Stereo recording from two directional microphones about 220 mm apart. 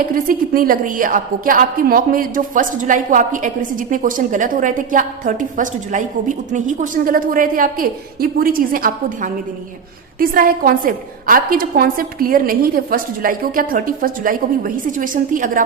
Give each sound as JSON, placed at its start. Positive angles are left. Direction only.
{"t": 0.1, "sound": "a woman's voice", "side_deg": -40}